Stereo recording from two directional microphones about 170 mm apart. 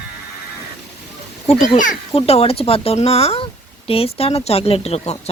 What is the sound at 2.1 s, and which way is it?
Speech, 35° left (ahead or behind).